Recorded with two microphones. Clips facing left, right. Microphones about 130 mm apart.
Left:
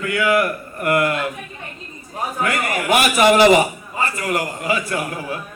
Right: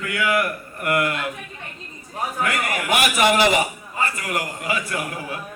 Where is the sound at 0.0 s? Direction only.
30° left (ahead or behind).